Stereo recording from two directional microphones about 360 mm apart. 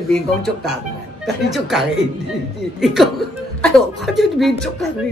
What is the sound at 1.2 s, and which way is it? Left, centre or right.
A woman's voice, centre.